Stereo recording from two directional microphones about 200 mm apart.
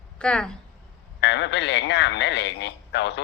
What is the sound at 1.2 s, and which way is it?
A man's voice, 60° left (ahead or behind).